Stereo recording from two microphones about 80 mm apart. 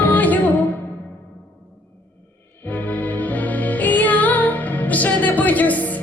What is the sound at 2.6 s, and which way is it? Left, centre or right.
Music, left.